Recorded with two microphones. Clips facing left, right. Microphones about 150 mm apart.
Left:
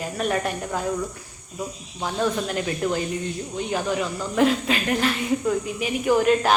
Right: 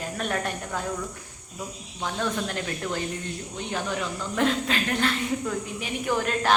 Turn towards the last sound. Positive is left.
turn(degrees=10)  # may be behind; listen again after turning